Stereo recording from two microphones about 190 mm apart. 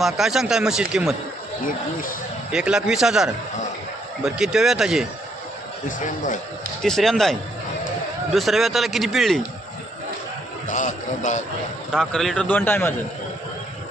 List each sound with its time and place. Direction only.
0.0 s speech: centre (ahead or behind)
1.6 s speech: 45° left (ahead or behind)
2.5 s speech: 5° right (ahead or behind)
6.0 s speech: 40° left (ahead or behind)
6.8 s speech: centre (ahead or behind)
10.7 s a man's voice: 40° left (ahead or behind)
11.9 s speech: centre (ahead or behind)